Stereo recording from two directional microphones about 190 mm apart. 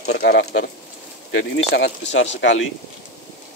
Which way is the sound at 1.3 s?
75° left (ahead or behind).